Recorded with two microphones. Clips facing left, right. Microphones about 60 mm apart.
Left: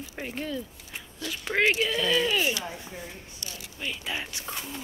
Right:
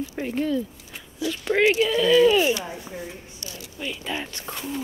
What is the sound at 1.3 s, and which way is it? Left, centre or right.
A woman's voice, centre.